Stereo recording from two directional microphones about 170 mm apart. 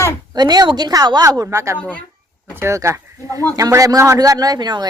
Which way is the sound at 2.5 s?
15° right (ahead or behind).